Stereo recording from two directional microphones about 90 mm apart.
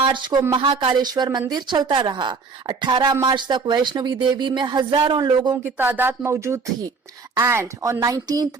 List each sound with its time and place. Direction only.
0.0 s a woman's voice: 60° right (ahead or behind)
5.7 s a woman's voice: 20° right (ahead or behind); by 8.4 s 45° right (ahead or behind)